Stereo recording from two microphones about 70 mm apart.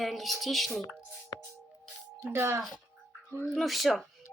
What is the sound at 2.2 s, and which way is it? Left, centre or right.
Speech, right.